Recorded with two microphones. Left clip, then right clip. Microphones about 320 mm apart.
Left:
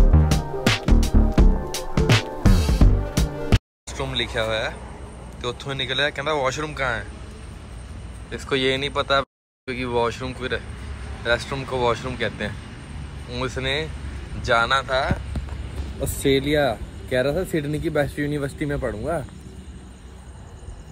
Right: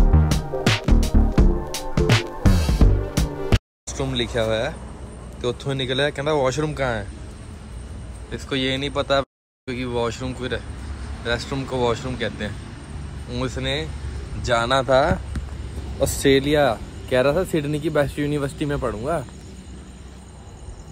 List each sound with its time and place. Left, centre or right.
0.0 s music: centre
5.4 s speech: centre
8.3 s speech: centre
16.0 s speech: centre
18.4 s speech: centre